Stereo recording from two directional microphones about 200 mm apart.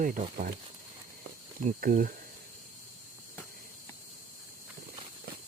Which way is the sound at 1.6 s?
40° right (ahead or behind).